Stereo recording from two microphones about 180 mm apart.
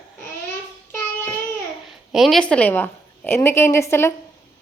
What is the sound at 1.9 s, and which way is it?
A woman's voice, centre (ahead or behind).